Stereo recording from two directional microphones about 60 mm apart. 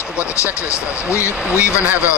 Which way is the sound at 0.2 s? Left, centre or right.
Left.